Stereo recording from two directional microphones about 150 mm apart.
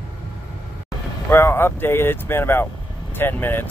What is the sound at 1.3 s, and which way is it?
Speech, 15° left (ahead or behind).